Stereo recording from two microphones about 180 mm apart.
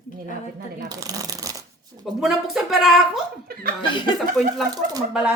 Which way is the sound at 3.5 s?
55° right (ahead or behind).